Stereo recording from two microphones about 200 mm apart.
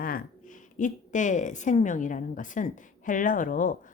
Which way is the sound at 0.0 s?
45° left (ahead or behind).